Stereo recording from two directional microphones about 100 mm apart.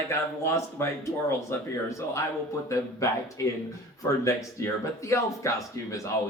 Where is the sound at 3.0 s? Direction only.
30° left (ahead or behind).